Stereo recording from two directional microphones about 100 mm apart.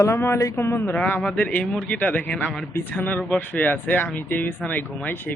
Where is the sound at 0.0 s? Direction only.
25° left (ahead or behind).